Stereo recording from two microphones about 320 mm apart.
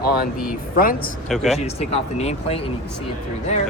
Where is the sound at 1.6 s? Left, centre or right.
Centre.